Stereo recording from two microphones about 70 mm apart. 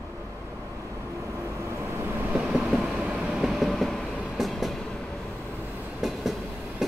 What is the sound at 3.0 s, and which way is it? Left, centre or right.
Train, centre.